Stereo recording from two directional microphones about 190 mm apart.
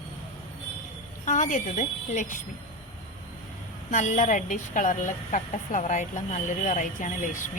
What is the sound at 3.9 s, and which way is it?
Speech, 40° left (ahead or behind).